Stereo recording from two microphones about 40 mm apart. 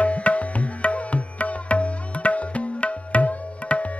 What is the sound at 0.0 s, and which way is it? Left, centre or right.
Music, left.